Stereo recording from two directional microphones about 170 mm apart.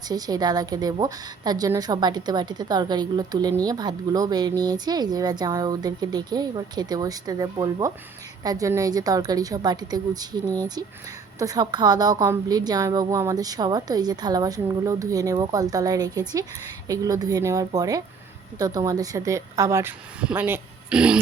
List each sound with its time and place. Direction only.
0.1 s a woman's voice: 20° right (ahead or behind); by 21.2 s 5° right (ahead or behind)